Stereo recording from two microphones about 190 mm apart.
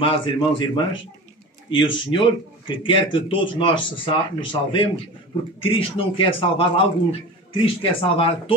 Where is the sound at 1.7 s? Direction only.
25° left (ahead or behind).